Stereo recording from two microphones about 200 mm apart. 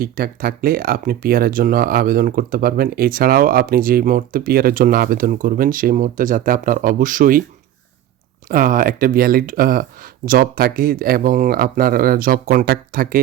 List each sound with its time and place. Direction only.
0.0 s speech: 45° right (ahead or behind)
8.4 s speech: 45° right (ahead or behind)